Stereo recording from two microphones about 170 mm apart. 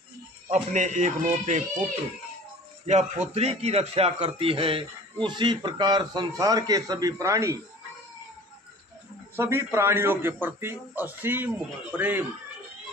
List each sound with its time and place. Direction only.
0.5 s a man's voice: 45° right (ahead or behind)
2.9 s a man's voice: 40° right (ahead or behind); by 7.6 s 20° right (ahead or behind)
9.4 s a man's voice: 15° right (ahead or behind)